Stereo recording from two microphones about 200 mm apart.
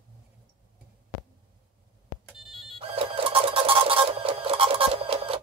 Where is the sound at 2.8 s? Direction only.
25° right (ahead or behind).